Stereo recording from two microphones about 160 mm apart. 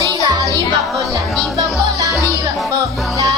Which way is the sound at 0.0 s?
20° right (ahead or behind).